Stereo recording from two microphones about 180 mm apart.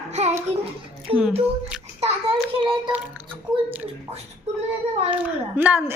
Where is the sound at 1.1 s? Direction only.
30° right (ahead or behind).